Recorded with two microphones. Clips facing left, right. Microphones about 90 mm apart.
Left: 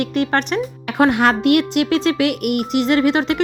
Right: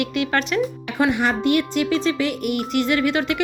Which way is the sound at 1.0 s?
80° left.